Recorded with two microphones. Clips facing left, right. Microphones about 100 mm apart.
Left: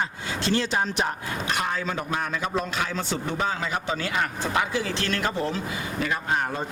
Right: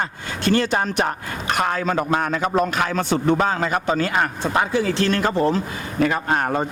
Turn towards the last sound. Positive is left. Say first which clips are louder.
# right 5 dB
turn(degrees=-60)  # may be behind; listen again after turning